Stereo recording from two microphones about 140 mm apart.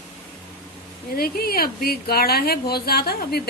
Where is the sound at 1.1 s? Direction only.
90° left.